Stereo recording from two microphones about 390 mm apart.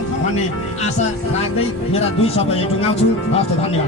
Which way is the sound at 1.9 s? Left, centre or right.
Centre.